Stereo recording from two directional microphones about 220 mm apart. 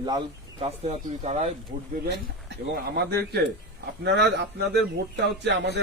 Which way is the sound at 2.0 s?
45° right (ahead or behind).